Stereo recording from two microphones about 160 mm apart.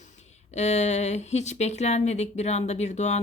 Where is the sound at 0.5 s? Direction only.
45° left (ahead or behind).